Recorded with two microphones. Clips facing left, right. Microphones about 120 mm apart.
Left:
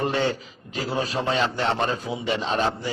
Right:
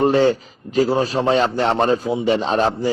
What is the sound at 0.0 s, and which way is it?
A man's voice, 35° right (ahead or behind).